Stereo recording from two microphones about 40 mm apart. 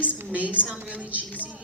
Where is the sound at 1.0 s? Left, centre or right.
Right.